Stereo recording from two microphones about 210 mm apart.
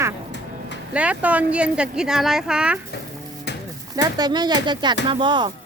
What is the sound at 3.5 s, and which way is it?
Music, 55° left (ahead or behind).